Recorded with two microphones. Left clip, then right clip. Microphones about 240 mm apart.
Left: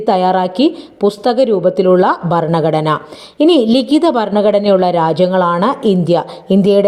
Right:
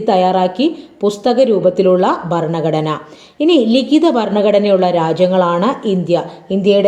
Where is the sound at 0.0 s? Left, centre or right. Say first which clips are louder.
Even; left.